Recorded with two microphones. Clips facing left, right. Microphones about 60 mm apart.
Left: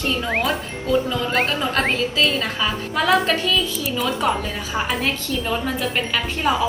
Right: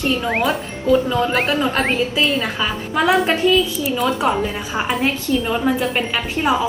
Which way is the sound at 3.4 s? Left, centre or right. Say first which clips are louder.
Right 6 dB; right.